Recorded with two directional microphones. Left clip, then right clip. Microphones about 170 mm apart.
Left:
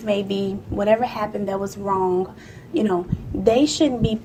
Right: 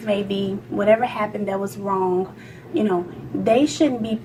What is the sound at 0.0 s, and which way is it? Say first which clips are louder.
A woman's voice: even; 35° left (ahead or behind).